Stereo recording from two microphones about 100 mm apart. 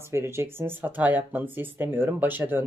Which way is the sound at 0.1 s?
25° right (ahead or behind).